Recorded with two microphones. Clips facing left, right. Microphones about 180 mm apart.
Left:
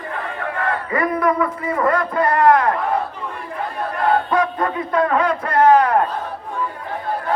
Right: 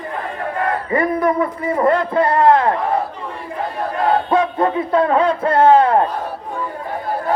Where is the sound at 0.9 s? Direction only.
25° right (ahead or behind).